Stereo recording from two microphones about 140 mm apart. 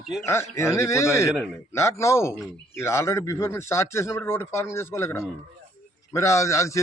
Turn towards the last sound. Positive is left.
turn(degrees=20)  # may be behind; listen again after turning